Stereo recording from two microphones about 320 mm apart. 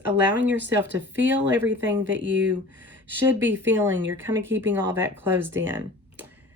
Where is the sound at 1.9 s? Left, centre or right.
Right.